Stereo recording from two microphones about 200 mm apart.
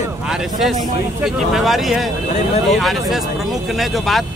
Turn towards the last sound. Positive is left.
turn(degrees=0)  # may be behind; listen again after turning